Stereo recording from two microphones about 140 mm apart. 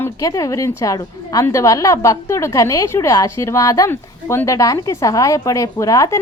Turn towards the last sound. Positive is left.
turn(degrees=25)  # may be behind; listen again after turning